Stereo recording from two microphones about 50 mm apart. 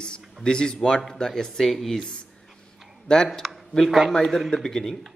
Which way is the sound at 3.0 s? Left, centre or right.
Centre.